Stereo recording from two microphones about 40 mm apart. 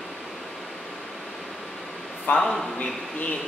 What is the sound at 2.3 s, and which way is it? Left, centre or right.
Speech, left.